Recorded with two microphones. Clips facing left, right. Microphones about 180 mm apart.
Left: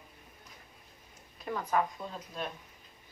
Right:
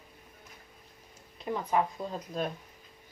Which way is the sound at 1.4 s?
20° right (ahead or behind).